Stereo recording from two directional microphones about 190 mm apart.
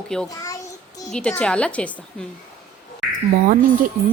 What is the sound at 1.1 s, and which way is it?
A woman's voice, 5° left (ahead or behind).